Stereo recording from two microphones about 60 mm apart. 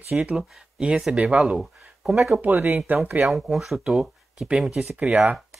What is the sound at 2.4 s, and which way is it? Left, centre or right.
Speech, right.